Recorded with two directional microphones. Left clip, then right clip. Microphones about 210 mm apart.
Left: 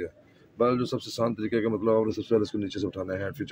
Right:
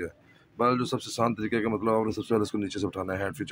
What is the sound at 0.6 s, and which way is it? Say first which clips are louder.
Speech: even; 10° right (ahead or behind).